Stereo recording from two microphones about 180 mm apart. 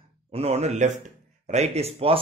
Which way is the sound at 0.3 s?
35° right (ahead or behind).